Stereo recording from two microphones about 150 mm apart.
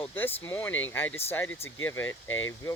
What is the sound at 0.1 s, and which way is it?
Speech, 15° left (ahead or behind).